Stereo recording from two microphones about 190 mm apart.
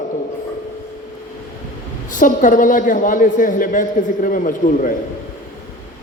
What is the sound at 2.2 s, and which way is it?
A man's voice, 45° left (ahead or behind).